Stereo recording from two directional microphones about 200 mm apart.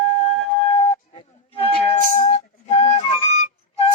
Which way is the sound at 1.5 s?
30° left (ahead or behind).